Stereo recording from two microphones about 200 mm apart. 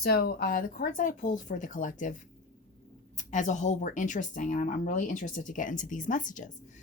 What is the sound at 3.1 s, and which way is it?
Speech, 40° left (ahead or behind).